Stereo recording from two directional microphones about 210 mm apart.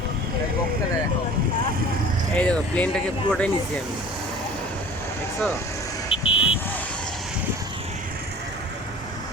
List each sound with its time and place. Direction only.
2.3 s speech: 5° left (ahead or behind)
6.1 s vehicle: 25° left (ahead or behind)